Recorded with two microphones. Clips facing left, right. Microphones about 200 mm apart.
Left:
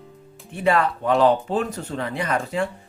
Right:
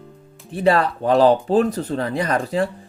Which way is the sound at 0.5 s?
35° right (ahead or behind).